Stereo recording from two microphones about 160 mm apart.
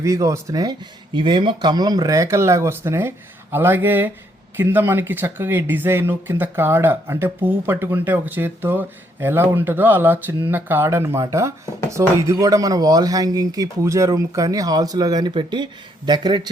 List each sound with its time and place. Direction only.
0.0 s speech: 20° right (ahead or behind)